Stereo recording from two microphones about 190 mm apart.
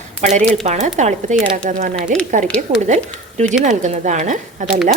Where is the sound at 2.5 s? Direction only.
5° left (ahead or behind).